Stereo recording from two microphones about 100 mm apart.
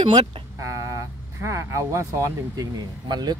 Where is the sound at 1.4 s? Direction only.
30° right (ahead or behind).